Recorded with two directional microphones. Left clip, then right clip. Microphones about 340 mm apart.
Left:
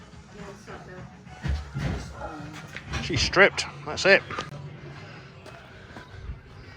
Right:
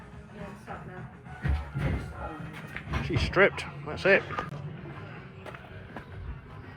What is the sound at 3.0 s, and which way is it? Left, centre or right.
Speech, centre.